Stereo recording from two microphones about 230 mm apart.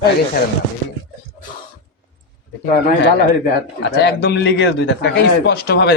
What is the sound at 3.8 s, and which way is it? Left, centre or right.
Speech, left.